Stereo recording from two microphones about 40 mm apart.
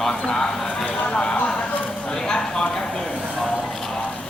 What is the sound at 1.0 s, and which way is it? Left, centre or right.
Speech, left.